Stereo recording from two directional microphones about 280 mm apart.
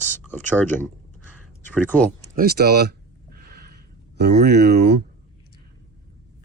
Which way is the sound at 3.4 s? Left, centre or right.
Right.